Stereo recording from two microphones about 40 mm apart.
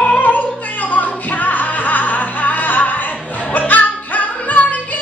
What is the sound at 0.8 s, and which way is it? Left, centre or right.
Music, left.